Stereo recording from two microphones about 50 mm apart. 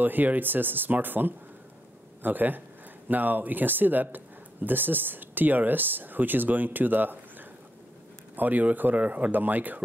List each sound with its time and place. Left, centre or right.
0.0 s speech: right